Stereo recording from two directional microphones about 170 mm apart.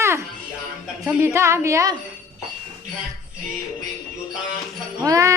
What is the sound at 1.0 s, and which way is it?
Speech, 15° right (ahead or behind).